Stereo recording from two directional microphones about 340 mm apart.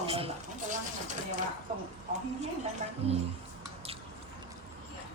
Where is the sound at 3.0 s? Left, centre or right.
Centre.